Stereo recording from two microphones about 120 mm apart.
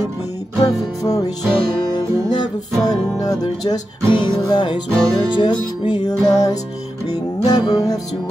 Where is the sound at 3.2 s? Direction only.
30° left (ahead or behind).